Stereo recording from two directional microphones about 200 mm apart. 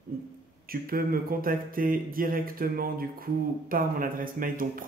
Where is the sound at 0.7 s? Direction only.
45° right (ahead or behind).